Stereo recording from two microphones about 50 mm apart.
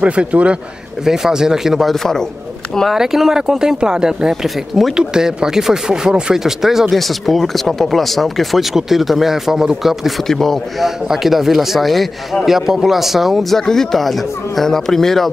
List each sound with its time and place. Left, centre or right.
0.0 s a man's voice: right
1.0 s speech: centre
10.2 s speech: centre
11.1 s speech: centre